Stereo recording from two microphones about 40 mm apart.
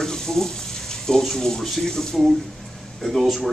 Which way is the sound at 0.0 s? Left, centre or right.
Centre.